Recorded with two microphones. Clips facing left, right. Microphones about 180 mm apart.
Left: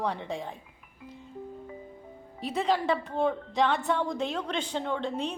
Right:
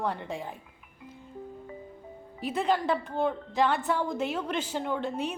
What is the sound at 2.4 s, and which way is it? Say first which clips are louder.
A woman's voice: even; centre (ahead or behind).